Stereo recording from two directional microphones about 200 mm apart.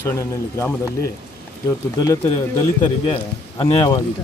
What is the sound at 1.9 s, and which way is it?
Speech, 15° left (ahead or behind).